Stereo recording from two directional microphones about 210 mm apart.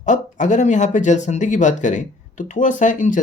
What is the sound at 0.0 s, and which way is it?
Speech, 35° left (ahead or behind).